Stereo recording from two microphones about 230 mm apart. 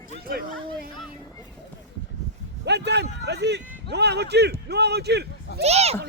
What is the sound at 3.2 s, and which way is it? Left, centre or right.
A man's voice, right.